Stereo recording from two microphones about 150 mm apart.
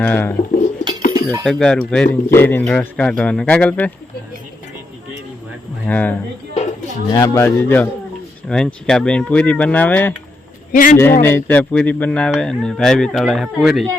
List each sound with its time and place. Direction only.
0.0 s speech: 10° left (ahead or behind)
1.1 s cutlery: 20° right (ahead or behind)
1.5 s speech: 5° left (ahead or behind)
5.9 s speech: 10° left (ahead or behind)
7.1 s speech: 20° left (ahead or behind)
10.7 s a man's voice: 65° left (ahead or behind)
10.9 s speech: 15° left (ahead or behind); by 13.8 s centre (ahead or behind)